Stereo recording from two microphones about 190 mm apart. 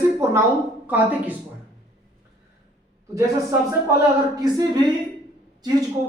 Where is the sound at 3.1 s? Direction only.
15° right (ahead or behind).